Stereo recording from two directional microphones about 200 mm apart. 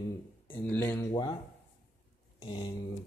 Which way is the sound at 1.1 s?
20° left (ahead or behind).